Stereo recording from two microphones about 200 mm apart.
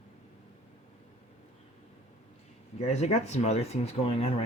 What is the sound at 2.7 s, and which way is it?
Speech, 35° left (ahead or behind).